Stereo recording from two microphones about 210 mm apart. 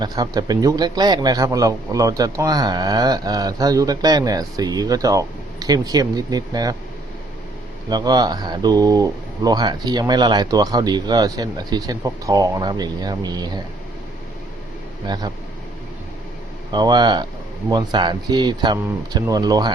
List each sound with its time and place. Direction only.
0.0 s a man's voice: 20° right (ahead or behind)
7.9 s speech: 20° right (ahead or behind)
15.0 s speech: 20° right (ahead or behind)
16.7 s speech: 20° right (ahead or behind)